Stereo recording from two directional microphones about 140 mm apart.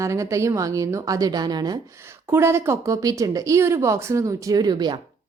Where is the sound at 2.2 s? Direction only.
15° right (ahead or behind).